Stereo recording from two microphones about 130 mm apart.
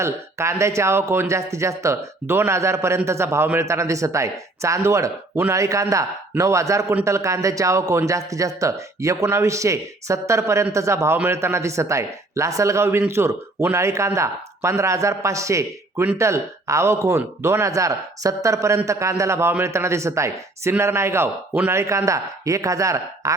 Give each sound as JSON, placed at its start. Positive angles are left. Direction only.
{"t": 0.0, "sound": "speech", "side_deg": -20}